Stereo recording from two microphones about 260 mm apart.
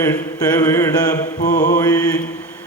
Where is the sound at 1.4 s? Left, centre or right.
Left.